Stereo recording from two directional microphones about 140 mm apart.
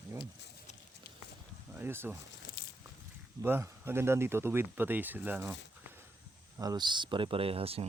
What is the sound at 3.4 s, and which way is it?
Speech, 15° right (ahead or behind).